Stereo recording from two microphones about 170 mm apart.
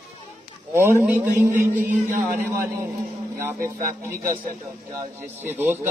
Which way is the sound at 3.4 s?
15° right (ahead or behind).